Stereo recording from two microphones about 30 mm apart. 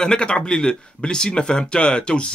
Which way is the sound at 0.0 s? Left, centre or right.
Left.